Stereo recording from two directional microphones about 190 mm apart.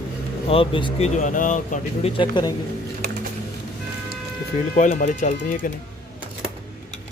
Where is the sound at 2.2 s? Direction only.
20° left (ahead or behind).